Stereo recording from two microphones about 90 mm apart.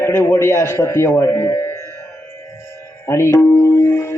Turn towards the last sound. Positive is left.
turn(degrees=30)  # may be behind; listen again after turning